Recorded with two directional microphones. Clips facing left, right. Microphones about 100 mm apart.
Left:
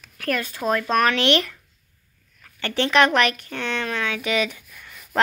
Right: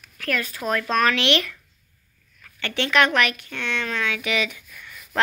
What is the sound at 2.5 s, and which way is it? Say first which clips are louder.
A woman's voice: left 2 dB; 35° left (ahead or behind).